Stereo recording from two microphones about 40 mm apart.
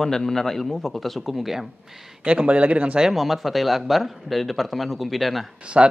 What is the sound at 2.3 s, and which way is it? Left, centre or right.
Speech, right.